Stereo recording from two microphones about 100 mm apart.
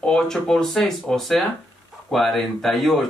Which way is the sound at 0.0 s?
5° left (ahead or behind).